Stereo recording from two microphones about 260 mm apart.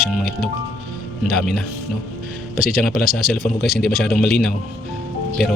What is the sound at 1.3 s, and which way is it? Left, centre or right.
Speech, centre.